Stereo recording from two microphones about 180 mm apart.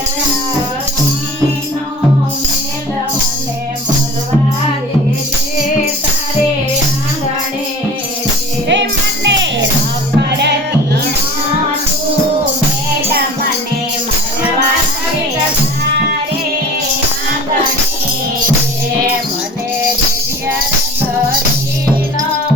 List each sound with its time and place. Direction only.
8.6 s music: 75° right (ahead or behind)
10.2 s music: 70° right (ahead or behind)